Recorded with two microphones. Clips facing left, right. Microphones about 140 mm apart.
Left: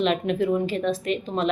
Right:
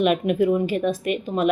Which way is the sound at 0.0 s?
10° right (ahead or behind).